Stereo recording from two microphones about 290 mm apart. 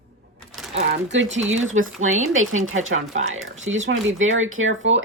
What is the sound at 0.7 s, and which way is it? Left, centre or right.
Speech, right.